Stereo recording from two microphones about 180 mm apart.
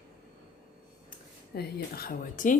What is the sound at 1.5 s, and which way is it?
Speech, 55° left (ahead or behind).